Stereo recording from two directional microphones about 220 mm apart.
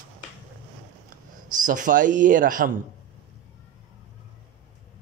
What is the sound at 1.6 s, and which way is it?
Speech, 35° right (ahead or behind).